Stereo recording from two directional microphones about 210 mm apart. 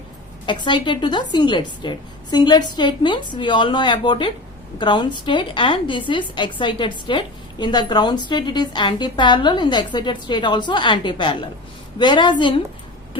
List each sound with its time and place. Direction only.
0.4 s a woman's voice: 20° left (ahead or behind)